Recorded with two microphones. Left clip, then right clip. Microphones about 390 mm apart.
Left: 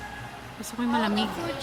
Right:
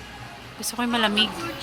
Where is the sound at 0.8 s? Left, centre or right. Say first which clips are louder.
Right 5 dB; centre.